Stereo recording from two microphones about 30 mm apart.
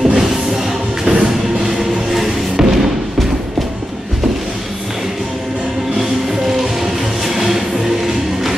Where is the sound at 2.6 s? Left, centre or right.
Centre.